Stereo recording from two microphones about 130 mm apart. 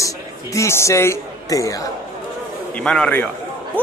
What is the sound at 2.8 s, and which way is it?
Speech, 10° left (ahead or behind).